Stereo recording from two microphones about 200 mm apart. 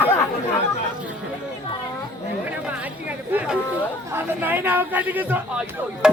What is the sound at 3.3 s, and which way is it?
A man's voice, 10° right (ahead or behind).